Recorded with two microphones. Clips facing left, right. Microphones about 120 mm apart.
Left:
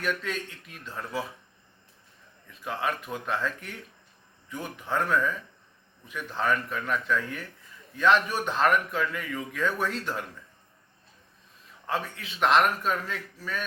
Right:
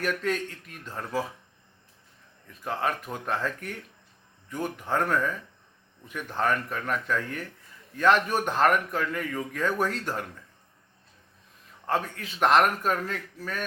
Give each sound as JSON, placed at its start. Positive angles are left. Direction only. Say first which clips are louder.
{"t": 0.0, "sound": "a man's voice", "louder": "right 3 dB", "side_deg": -45}
{"t": 2.5, "sound": "a man's voice", "louder": "right 1 dB", "side_deg": -45}
{"t": 11.9, "sound": "a man's voice", "louder": "right 3 dB", "side_deg": -45}